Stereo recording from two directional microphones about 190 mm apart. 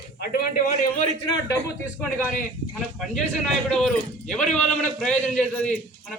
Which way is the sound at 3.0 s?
Centre (ahead or behind).